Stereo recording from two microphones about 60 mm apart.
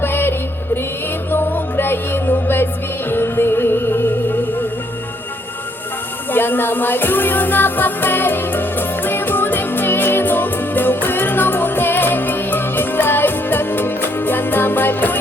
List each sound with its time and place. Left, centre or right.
0.0 s music: left
6.3 s music: left